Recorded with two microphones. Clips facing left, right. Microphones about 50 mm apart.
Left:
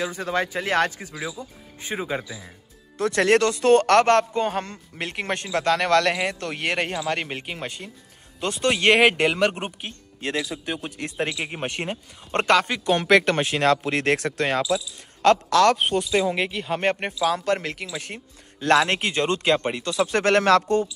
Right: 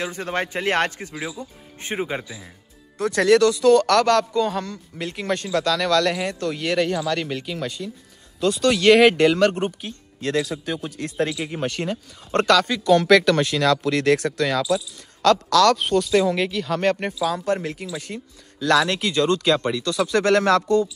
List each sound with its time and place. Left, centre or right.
0.2 s a man's voice: right
2.0 s speech: right
2.2 s speech: centre
3.0 s speech: left; by 9.8 s centre
9.8 s speech: left
15.9 s speech: centre
17.2 s speech: left